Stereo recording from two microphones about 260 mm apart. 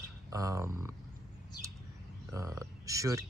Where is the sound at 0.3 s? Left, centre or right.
Centre.